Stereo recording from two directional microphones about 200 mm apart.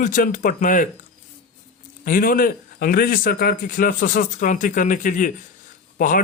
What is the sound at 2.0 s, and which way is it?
A man's voice, 45° left (ahead or behind).